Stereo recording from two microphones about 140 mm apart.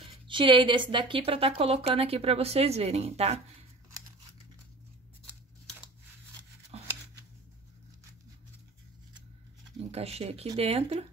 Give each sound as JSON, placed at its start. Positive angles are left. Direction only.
{"t": 0.3, "sound": "a woman's voice", "side_deg": -35}
{"t": 9.8, "sound": "a woman's voice", "side_deg": -45}